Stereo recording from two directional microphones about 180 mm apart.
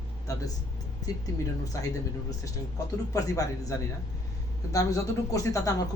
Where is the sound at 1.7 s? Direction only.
15° left (ahead or behind).